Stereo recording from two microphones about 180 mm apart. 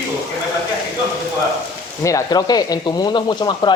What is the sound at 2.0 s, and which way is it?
Speech, 20° left (ahead or behind).